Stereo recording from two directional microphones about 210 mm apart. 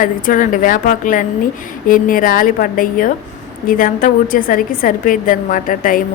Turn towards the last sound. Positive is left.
turn(degrees=40)  # may be behind; listen again after turning